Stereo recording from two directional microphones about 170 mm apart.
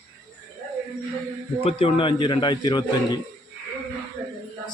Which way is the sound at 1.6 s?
30° left (ahead or behind).